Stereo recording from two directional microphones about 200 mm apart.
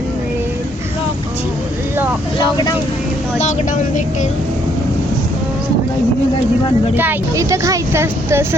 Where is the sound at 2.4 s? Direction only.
20° left (ahead or behind).